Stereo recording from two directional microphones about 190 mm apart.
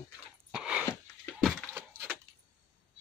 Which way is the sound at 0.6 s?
5° right (ahead or behind).